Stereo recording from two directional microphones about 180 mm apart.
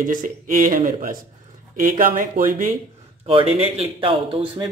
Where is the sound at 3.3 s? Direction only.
30° right (ahead or behind).